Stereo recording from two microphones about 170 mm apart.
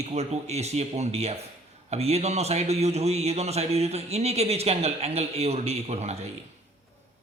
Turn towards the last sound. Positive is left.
turn(degrees=-40)  # may be behind; listen again after turning